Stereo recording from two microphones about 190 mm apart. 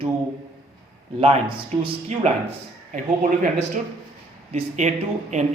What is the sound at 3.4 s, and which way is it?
Speech, 40° right (ahead or behind).